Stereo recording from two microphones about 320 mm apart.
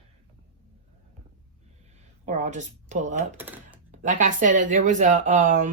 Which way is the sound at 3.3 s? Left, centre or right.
Centre.